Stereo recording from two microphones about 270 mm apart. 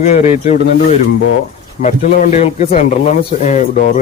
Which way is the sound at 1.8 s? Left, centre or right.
Left.